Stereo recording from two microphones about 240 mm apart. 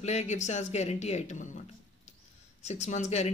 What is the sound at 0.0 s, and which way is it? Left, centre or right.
Speech, left.